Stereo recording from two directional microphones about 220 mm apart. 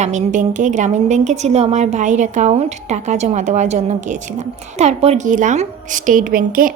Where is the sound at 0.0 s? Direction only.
30° right (ahead or behind).